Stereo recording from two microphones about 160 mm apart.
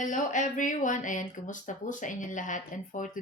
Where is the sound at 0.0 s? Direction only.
55° left (ahead or behind).